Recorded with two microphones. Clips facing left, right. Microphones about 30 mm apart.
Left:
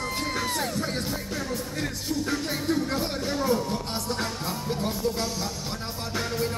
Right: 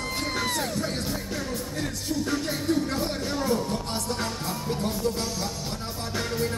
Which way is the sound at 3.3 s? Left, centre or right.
Centre.